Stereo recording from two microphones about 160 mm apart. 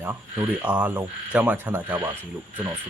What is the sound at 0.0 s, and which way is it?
Speech, 15° right (ahead or behind).